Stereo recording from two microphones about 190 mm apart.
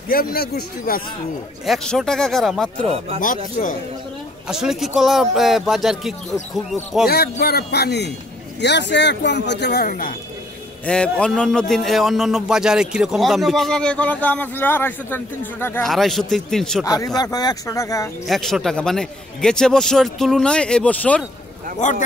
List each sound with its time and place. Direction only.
0.1 s speech: 50° left (ahead or behind)
1.7 s a man's voice: centre (ahead or behind)
4.5 s a man's voice: centre (ahead or behind)
7.1 s speech: 55° left (ahead or behind)
10.9 s a man's voice: 5° left (ahead or behind)
15.9 s a man's voice: centre (ahead or behind)
16.8 s speech: 20° left (ahead or behind)
18.2 s a man's voice: centre (ahead or behind)
21.8 s speech: 40° left (ahead or behind)